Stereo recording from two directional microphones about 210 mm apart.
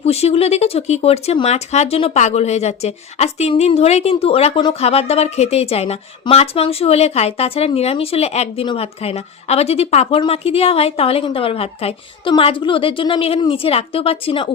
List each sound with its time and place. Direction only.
0.0 s speech: 30° left (ahead or behind)